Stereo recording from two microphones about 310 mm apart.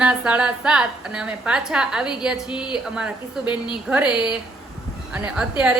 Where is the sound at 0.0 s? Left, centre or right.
Centre.